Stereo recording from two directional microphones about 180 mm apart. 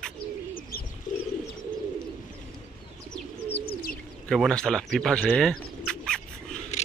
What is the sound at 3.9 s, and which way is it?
Bird, 5° left (ahead or behind).